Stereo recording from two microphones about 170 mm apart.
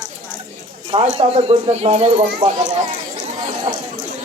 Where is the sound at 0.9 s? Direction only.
35° right (ahead or behind).